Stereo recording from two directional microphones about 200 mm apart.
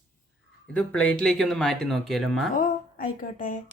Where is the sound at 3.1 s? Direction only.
40° left (ahead or behind).